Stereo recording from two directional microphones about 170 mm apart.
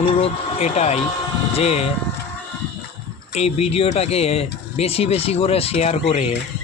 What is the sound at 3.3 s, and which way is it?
Speech, 40° left (ahead or behind).